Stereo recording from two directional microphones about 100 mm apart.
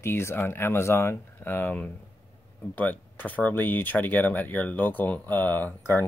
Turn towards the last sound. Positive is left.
turn(degrees=20)  # may be behind; listen again after turning